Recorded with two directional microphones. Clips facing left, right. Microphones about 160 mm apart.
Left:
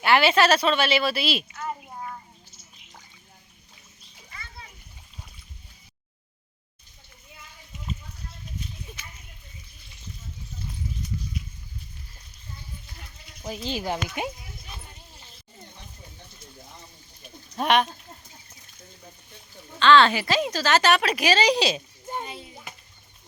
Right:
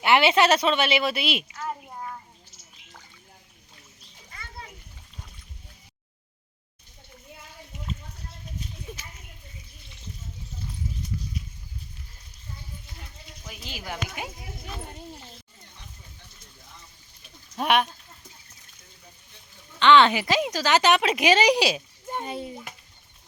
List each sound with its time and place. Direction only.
0.0 s speech: 20° right (ahead or behind)
1.6 s a sound: centre (ahead or behind)
13.4 s speech: 30° left (ahead or behind)
17.6 s speech: 5° right (ahead or behind)
19.8 s speech: 20° right (ahead or behind)
22.2 s a child's voice: 50° right (ahead or behind)